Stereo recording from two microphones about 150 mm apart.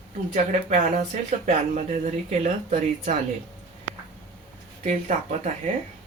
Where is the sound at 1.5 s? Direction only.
55° right (ahead or behind).